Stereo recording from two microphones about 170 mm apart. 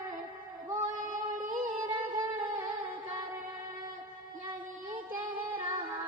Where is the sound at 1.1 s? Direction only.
50° right (ahead or behind).